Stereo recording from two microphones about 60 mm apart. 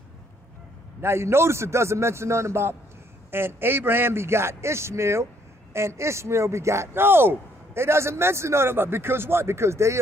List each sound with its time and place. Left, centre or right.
1.0 s speech: right